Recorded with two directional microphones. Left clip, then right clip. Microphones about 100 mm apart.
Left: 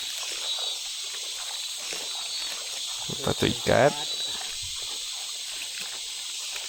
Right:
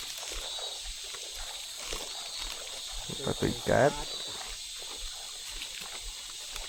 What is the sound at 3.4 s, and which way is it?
Speech, 55° left (ahead or behind).